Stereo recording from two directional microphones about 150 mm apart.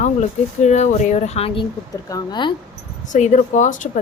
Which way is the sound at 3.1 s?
55° left (ahead or behind).